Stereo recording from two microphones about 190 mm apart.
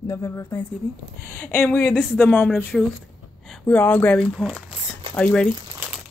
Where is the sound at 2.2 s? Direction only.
10° left (ahead or behind).